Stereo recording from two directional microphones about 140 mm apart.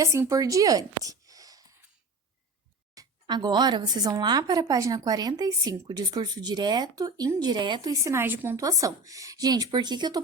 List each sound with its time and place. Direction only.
0.0 s speech: 20° right (ahead or behind)
2.9 s a woman's voice: 30° right (ahead or behind)